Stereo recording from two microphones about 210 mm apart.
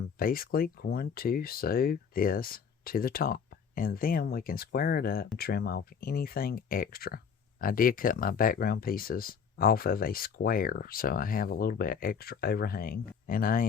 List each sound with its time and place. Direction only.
0.2 s speech: 45° left (ahead or behind)